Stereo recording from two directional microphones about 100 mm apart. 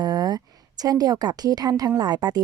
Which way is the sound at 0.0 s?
45° right (ahead or behind).